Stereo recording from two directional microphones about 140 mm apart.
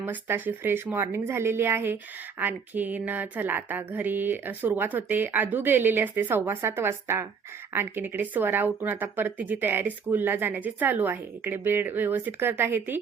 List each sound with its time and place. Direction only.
0.0 s speech: 15° right (ahead or behind)